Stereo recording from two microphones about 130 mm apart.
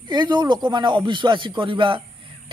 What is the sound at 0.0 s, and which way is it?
Speech, 35° right (ahead or behind).